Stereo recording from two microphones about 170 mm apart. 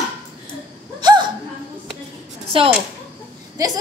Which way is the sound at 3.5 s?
20° right (ahead or behind).